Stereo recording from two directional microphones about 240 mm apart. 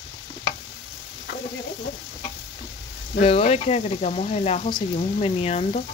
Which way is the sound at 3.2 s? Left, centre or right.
Left.